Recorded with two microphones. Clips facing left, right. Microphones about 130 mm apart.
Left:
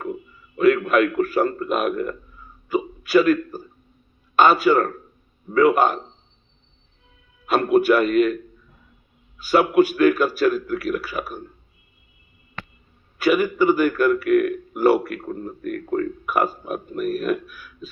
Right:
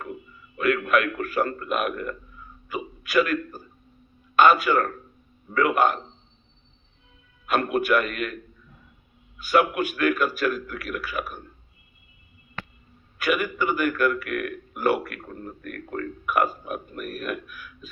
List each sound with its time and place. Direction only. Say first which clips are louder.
0.5 s a man's voice: left 6 dB; 35° left (ahead or behind)
2.6 s hiccup: left 9 dB; 35° left (ahead or behind)
4.4 s a man's voice: left 3 dB; 35° left (ahead or behind)
7.4 s a man's voice: left 7 dB; 30° left (ahead or behind)
9.5 s a man's voice: left 5 dB; 35° left (ahead or behind)
13.1 s a man's voice: left 7 dB; 35° left (ahead or behind)